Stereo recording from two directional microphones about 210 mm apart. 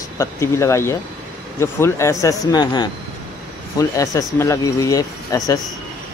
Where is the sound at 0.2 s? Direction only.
15° left (ahead or behind).